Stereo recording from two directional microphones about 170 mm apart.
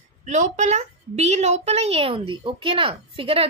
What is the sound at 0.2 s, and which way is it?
A woman's voice, 45° right (ahead or behind).